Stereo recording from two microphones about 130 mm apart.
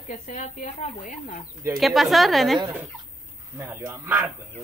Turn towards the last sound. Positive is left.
turn(degrees=-25)  # may be behind; listen again after turning